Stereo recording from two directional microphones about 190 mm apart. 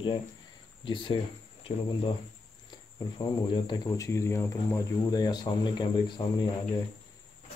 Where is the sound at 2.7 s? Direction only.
25° left (ahead or behind).